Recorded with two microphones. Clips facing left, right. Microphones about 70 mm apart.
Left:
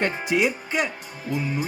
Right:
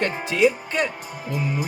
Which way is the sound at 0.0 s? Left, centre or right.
Centre.